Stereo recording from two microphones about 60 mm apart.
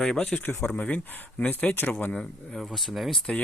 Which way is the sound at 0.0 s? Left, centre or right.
Centre.